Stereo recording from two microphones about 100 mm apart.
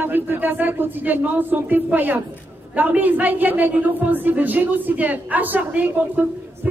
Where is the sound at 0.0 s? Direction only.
20° right (ahead or behind).